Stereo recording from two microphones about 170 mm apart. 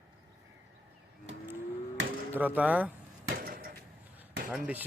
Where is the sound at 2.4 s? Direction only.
10° right (ahead or behind).